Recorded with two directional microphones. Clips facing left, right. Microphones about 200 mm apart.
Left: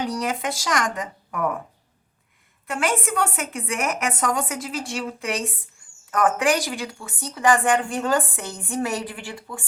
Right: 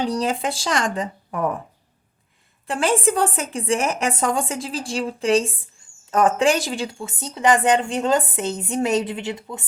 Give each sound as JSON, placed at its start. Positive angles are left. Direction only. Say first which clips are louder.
{"t": 0.0, "sound": "speech", "louder": "right 3 dB", "side_deg": -30}
{"t": 2.6, "sound": "speech", "louder": "right 4 dB", "side_deg": -30}